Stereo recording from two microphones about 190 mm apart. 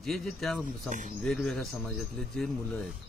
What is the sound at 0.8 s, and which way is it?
Speech, 40° right (ahead or behind).